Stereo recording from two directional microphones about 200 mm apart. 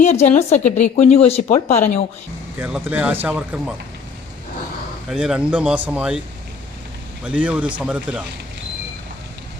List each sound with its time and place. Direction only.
0.0 s speech: 35° left (ahead or behind)
2.6 s speech: 5° right (ahead or behind)
5.0 s speech: 5° right (ahead or behind)
7.3 s speech: 5° right (ahead or behind)